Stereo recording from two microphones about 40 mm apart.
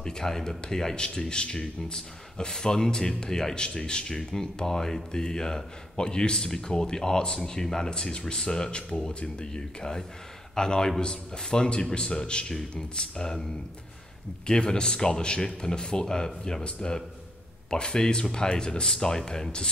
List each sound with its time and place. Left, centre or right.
0.0 s speech: centre
14.4 s speech: left